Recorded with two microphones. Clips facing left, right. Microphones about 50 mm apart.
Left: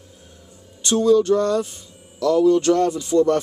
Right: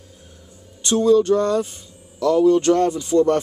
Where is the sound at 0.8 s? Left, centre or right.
Centre.